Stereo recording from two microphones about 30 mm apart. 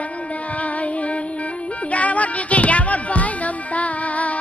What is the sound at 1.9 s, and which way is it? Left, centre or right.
Music, left.